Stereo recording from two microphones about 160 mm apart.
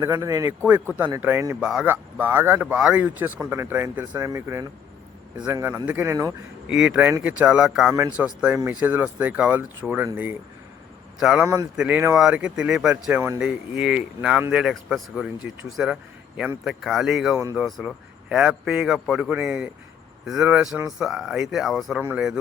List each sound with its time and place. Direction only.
0.0 s speech: 20° right (ahead or behind)
6.7 s speech: 5° right (ahead or behind)
11.2 s speech: 5° right (ahead or behind)